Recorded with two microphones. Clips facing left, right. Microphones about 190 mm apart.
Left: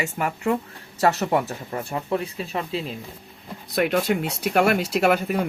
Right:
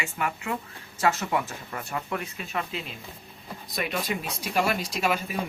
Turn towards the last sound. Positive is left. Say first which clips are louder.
# left 7 dB
turn(degrees=65)  # may be behind; listen again after turning